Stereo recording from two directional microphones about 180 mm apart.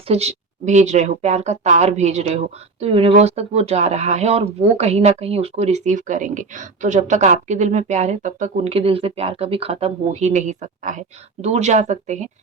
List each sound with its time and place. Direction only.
0.1 s speech: 35° right (ahead or behind)